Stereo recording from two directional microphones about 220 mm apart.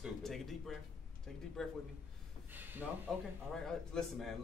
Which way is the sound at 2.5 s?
10° right (ahead or behind).